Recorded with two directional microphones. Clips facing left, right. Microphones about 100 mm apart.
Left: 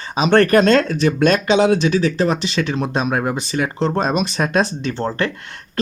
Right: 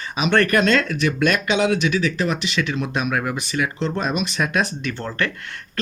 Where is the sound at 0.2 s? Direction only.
35° left (ahead or behind).